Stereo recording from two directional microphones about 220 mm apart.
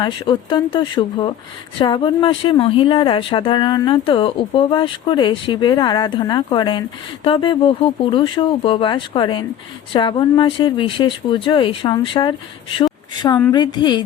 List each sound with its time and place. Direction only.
0.0 s a woman's voice: 20° left (ahead or behind)